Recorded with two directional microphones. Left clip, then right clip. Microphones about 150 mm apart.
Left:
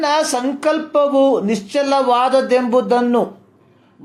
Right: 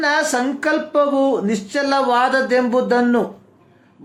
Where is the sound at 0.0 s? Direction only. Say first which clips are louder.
Left 1 dB; 30° left (ahead or behind).